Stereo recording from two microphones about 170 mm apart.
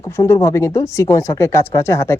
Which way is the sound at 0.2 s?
20° left (ahead or behind).